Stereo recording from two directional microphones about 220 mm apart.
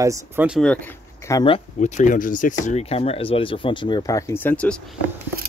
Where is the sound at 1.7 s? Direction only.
35° left (ahead or behind); by 5.0 s 5° left (ahead or behind).